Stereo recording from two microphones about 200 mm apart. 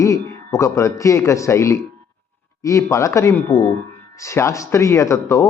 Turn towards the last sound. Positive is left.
turn(degrees=15)  # may be behind; listen again after turning